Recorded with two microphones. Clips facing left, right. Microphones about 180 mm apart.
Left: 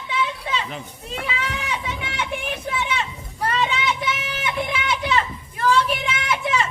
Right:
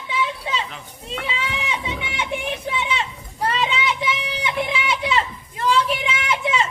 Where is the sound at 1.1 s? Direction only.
25° right (ahead or behind).